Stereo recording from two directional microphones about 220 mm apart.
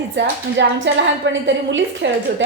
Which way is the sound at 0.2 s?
50° right (ahead or behind).